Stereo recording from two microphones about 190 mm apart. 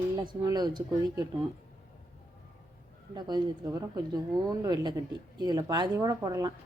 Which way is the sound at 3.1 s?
20° right (ahead or behind).